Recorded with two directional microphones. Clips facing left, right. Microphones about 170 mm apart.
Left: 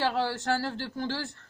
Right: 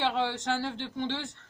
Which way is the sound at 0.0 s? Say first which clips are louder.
Left 1 dB; 5° left (ahead or behind).